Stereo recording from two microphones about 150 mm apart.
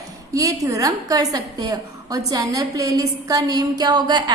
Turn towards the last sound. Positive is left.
turn(degrees=-30)  # may be behind; listen again after turning